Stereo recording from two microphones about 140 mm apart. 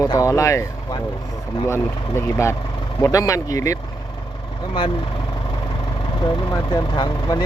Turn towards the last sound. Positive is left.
turn(degrees=30)  # may be behind; listen again after turning